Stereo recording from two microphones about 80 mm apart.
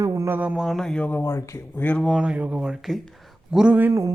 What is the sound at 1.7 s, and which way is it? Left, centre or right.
Speech, left.